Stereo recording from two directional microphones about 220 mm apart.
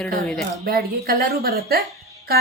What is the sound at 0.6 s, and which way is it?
Speech, 45° right (ahead or behind).